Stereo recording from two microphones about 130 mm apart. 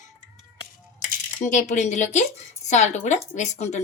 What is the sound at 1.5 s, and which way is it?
A woman's voice, 70° left (ahead or behind).